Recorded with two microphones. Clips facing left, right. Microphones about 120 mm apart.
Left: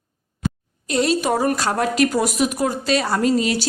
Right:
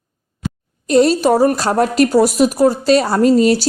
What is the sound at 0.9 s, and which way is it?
A woman's voice, 40° right (ahead or behind).